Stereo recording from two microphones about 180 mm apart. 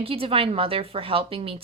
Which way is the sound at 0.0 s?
30° right (ahead or behind).